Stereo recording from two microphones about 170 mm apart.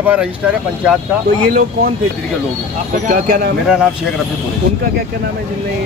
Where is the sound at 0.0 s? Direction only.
5° right (ahead or behind).